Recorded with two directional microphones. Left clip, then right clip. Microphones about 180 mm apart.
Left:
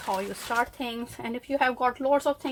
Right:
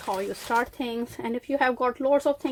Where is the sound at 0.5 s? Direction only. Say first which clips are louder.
Right 2 dB; 35° right (ahead or behind).